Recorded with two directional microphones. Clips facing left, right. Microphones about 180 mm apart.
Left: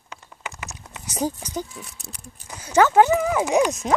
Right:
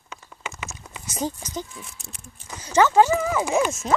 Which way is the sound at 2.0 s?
35° left (ahead or behind).